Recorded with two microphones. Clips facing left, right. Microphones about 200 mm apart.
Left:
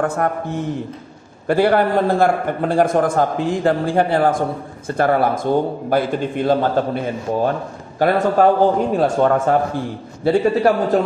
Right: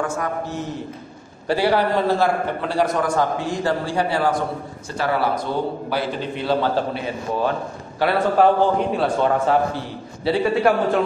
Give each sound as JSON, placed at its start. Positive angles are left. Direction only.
{"t": 0.0, "sound": "a man's voice", "side_deg": 55}